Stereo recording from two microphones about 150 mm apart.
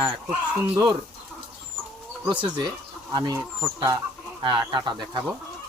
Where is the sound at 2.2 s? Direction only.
10° right (ahead or behind).